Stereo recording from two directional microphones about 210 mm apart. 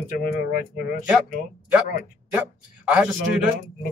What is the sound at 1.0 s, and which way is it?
A man's voice, 5° right (ahead or behind).